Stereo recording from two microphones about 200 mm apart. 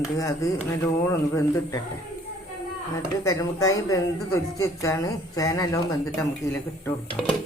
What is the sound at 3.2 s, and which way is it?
Speech, 15° left (ahead or behind).